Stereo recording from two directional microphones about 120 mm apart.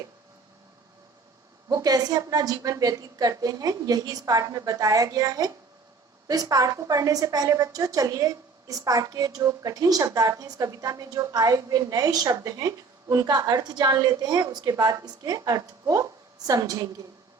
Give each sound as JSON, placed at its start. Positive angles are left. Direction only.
{"t": 1.7, "sound": "a woman's voice", "side_deg": -30}